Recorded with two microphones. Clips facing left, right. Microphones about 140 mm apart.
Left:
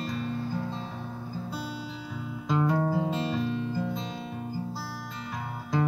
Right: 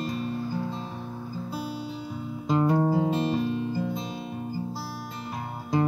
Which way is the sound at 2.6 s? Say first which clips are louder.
Right 3 dB; 15° right (ahead or behind).